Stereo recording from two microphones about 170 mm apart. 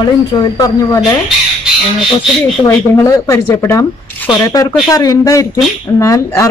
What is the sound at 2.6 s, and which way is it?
A man's voice, 20° left (ahead or behind).